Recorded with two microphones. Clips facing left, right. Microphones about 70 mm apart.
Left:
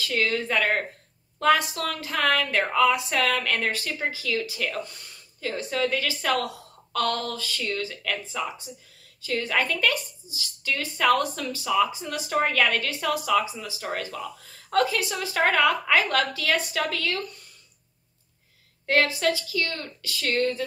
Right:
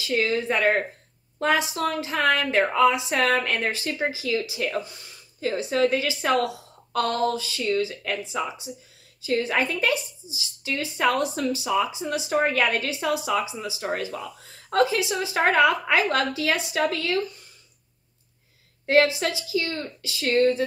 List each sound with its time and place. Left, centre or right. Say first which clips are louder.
0.0 s a woman's voice: right 2 dB; right
9.2 s speech: right 2 dB; right
13.8 s speech: right 2 dB; right
18.9 s speech: right 2 dB; right